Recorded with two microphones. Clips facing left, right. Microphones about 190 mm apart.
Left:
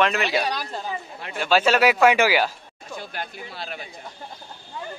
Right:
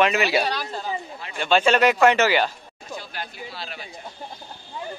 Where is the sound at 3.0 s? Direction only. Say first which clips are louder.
Left 2 dB; 50° left (ahead or behind).